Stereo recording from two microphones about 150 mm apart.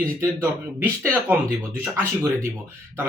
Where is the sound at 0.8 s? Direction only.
10° right (ahead or behind).